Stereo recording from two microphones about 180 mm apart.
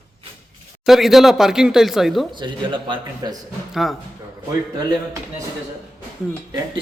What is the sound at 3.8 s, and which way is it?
Speech, centre (ahead or behind).